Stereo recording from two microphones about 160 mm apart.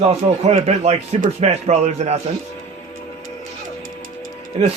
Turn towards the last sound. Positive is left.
turn(degrees=-60)  # may be behind; listen again after turning